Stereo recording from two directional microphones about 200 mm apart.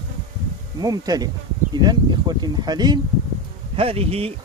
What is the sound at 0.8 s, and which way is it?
Speech, 20° right (ahead or behind).